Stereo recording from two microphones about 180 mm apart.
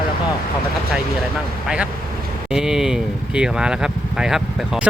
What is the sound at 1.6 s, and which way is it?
Speech, 5° right (ahead or behind).